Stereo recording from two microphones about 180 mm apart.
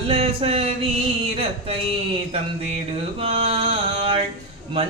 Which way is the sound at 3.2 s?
35° right (ahead or behind).